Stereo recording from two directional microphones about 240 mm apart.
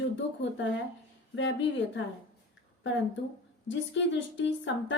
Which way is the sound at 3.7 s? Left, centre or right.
Left.